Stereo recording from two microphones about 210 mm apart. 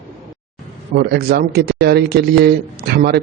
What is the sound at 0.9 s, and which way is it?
Speech, 50° right (ahead or behind).